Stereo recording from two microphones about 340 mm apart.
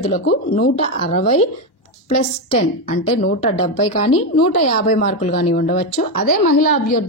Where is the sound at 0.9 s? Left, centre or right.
Centre.